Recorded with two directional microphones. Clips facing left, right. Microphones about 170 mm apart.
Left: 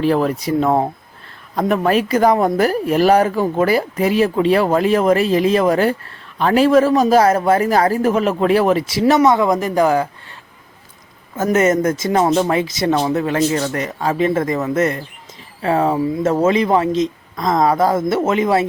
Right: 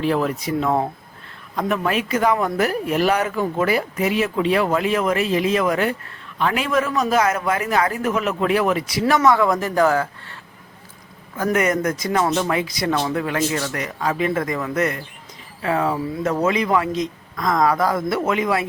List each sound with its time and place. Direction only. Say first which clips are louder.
0.0 s speech: left 4 dB; 40° left (ahead or behind); by 10.3 s 15° left (ahead or behind)
11.3 s speech: left 5 dB; 25° left (ahead or behind)